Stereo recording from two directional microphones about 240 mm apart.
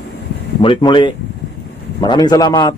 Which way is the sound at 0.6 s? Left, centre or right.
Left.